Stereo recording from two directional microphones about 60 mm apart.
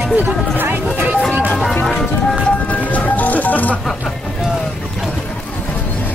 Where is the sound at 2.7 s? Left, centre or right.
Left.